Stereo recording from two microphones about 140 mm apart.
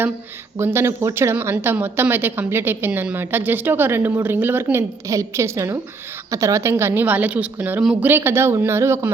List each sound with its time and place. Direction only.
0.6 s a woman's voice: 15° right (ahead or behind)